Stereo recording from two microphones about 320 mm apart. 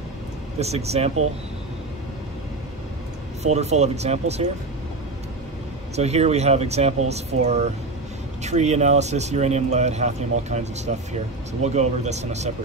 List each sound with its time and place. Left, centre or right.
0.6 s speech: centre
3.5 s speech: right
5.9 s speech: centre